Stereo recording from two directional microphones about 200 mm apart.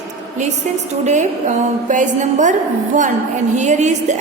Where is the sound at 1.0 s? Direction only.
35° right (ahead or behind).